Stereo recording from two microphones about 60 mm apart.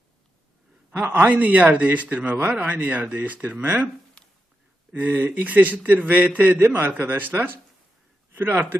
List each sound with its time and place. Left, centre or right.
0.9 s a man's voice: right
4.2 s a sound: centre
4.9 s a man's voice: right
6.6 s a man's voice: right